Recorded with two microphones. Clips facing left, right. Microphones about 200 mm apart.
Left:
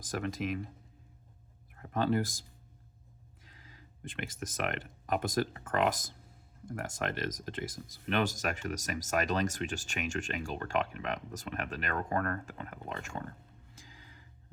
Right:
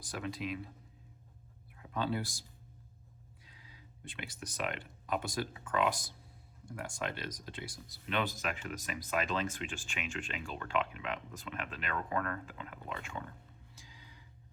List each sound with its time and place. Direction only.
0.1 s speech: 45° left (ahead or behind)
1.7 s speech: 50° left (ahead or behind)
3.4 s music: 45° left (ahead or behind)
4.4 s speech: 50° left (ahead or behind)
13.7 s music: 50° left (ahead or behind)